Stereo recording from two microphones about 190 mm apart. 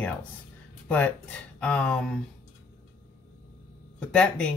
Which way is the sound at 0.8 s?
10° left (ahead or behind).